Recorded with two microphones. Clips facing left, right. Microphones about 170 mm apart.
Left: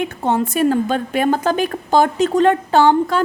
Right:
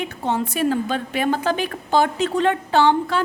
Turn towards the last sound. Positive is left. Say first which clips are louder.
# left 4 dB
turn(degrees=45)  # may be behind; listen again after turning